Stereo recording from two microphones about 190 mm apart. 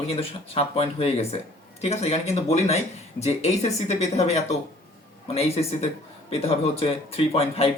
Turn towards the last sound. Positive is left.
turn(degrees=30)  # may be behind; listen again after turning